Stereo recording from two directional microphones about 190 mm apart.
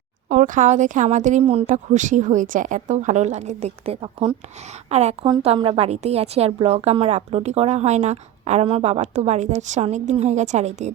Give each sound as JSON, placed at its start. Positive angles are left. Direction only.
{"t": 0.3, "sound": "a woman's voice", "side_deg": -40}